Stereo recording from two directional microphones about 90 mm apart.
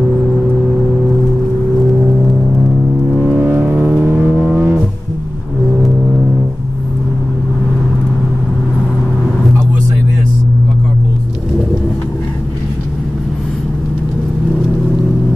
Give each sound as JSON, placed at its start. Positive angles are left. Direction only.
{"t": 3.2, "sound": "vehicle", "side_deg": -10}
{"t": 3.4, "sound": "vehicle", "side_deg": -25}